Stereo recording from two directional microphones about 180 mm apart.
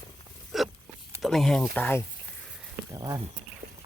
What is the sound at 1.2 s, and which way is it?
Speech, centre (ahead or behind).